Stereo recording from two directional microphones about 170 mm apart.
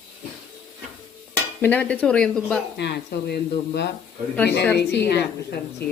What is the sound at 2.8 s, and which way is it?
Speech, 75° left (ahead or behind).